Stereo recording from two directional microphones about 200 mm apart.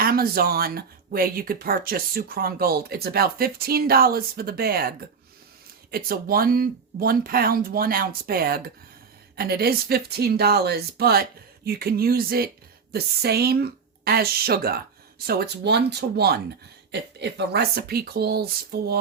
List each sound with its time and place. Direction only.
0.0 s speech: 50° right (ahead or behind)